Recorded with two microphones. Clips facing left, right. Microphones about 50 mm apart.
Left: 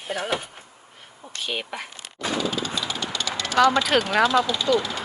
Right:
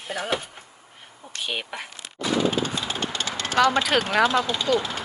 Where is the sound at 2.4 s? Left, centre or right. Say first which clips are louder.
Right 2 dB; right.